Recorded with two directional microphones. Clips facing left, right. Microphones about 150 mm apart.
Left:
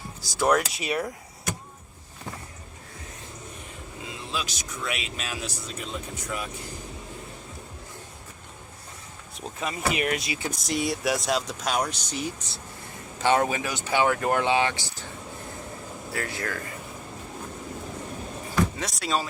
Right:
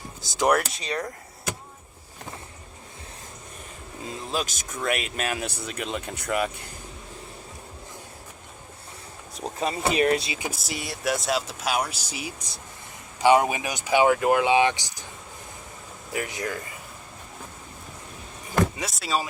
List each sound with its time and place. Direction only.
0.2 s speech: 25° right (ahead or behind)
0.7 s speech: 10° left (ahead or behind)
4.3 s speech: 45° right (ahead or behind); by 6.5 s 65° right (ahead or behind)
9.4 s speech: 35° right (ahead or behind)
10.5 s speech: 5° right (ahead or behind)
16.1 s speech: 15° right (ahead or behind)
18.8 s speech: centre (ahead or behind)